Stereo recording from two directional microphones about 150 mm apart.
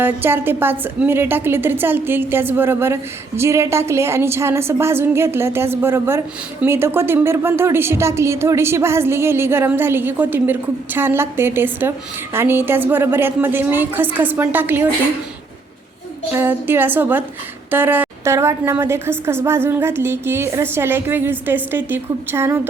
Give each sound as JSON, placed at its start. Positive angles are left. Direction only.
{"t": 0.0, "sound": "a woman's voice", "side_deg": -15}
{"t": 16.3, "sound": "a woman's voice", "side_deg": -15}